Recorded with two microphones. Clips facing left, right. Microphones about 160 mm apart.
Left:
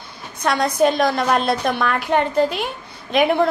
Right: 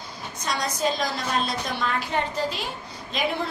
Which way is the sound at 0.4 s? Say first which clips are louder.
Left 10 dB; 60° left (ahead or behind).